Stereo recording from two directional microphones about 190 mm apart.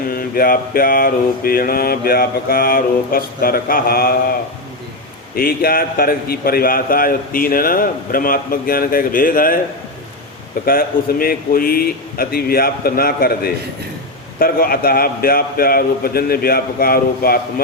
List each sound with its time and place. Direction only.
0.1 s a man's voice: 50° left (ahead or behind)
5.3 s a man's voice: 50° left (ahead or behind)
10.7 s a man's voice: 50° left (ahead or behind)